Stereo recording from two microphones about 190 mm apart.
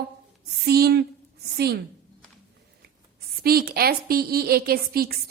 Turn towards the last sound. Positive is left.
turn(degrees=-55)  # may be behind; listen again after turning